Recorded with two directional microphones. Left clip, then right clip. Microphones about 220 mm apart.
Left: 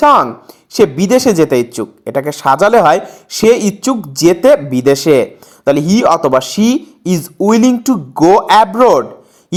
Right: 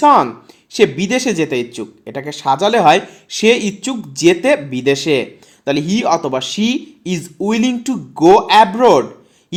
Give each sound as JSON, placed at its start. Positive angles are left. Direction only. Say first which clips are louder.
{"t": 0.0, "sound": "speech", "louder": "left 2 dB", "side_deg": 25}